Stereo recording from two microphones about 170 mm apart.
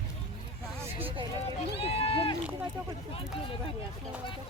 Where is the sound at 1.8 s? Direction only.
35° left (ahead or behind).